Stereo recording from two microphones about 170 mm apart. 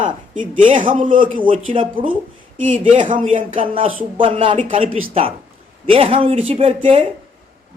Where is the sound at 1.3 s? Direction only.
30° right (ahead or behind).